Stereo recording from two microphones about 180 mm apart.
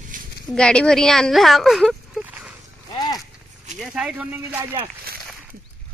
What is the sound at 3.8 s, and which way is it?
Speech, 5° right (ahead or behind).